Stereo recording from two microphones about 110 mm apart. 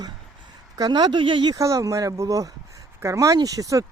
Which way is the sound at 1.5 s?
30° right (ahead or behind).